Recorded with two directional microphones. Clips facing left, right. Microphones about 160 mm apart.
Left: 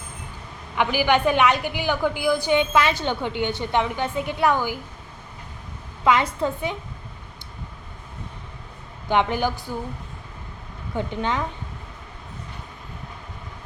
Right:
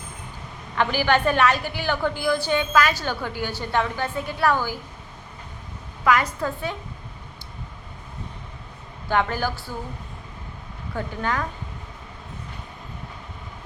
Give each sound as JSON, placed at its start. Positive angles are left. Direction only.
{"t": 0.8, "sound": "a woman's voice", "side_deg": 15}
{"t": 6.1, "sound": "a woman's voice", "side_deg": 25}
{"t": 9.0, "sound": "a woman's voice", "side_deg": 20}
{"t": 10.9, "sound": "a woman's voice", "side_deg": 20}